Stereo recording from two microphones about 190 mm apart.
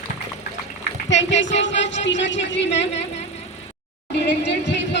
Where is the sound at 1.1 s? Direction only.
75° left (ahead or behind).